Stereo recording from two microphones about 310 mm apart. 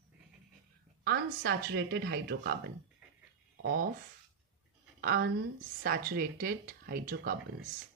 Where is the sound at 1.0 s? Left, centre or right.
Right.